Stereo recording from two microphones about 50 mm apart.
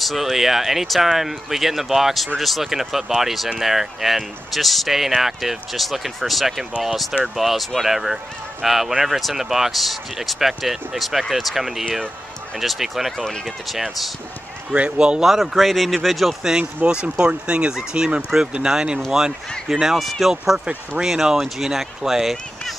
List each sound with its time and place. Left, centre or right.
0.0 s speech: centre
14.7 s speech: centre
15.2 s speech: centre
16.5 s speech: centre